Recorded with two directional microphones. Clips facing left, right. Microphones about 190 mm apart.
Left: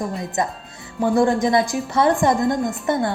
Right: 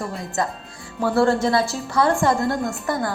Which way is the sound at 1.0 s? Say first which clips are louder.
Left 1 dB; 15° left (ahead or behind).